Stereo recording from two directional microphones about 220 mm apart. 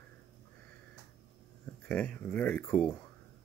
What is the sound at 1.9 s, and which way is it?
Speech, 5° left (ahead or behind).